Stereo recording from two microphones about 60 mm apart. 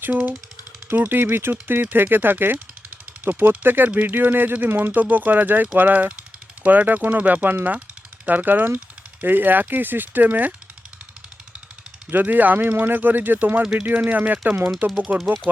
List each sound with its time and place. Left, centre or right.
0.0 s speech: right
12.1 s speech: right